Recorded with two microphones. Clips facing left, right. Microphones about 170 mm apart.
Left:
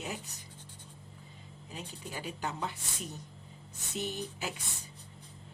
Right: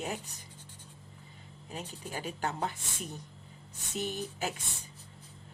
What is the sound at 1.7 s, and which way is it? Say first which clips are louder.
Speech: right 3 dB; 45° right (ahead or behind).